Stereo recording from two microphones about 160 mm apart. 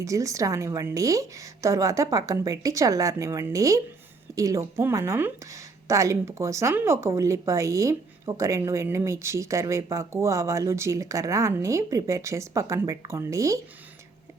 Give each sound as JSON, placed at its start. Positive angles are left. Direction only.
{"t": 0.0, "sound": "speech", "side_deg": -20}